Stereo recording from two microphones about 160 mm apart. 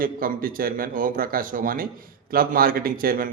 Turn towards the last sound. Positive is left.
turn(degrees=-65)  # may be behind; listen again after turning